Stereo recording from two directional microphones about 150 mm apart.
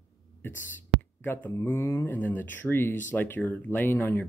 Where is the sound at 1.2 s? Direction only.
15° left (ahead or behind).